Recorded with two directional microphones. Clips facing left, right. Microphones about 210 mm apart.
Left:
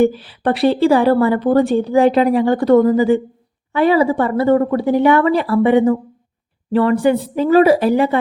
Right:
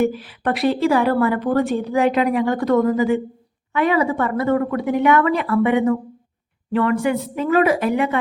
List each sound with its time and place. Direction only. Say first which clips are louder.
0.0 s a woman's voice: left 5 dB; 30° left (ahead or behind)